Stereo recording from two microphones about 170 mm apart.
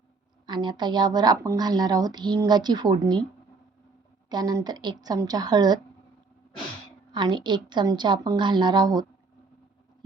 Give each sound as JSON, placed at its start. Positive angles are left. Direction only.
{"t": 0.4, "sound": "speech", "side_deg": -25}
{"t": 4.3, "sound": "speech", "side_deg": -25}
{"t": 7.1, "sound": "speech", "side_deg": -25}